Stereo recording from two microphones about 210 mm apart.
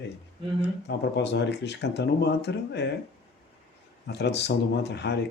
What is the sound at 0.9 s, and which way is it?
Speech, 55° left (ahead or behind).